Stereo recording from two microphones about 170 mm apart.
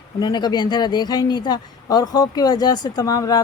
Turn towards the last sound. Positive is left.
turn(degrees=20)  # may be behind; listen again after turning